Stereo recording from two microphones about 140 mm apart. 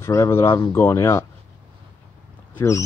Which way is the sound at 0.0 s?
20° left (ahead or behind).